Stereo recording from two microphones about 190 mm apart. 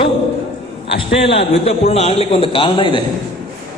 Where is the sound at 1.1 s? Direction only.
30° left (ahead or behind).